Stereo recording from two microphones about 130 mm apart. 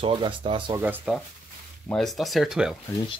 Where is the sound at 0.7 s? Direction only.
15° right (ahead or behind).